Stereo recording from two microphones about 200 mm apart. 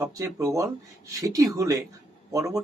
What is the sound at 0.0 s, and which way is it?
Speech, 15° right (ahead or behind).